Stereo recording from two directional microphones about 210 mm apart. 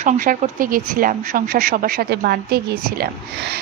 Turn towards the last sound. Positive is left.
turn(degrees=-50)  # may be behind; listen again after turning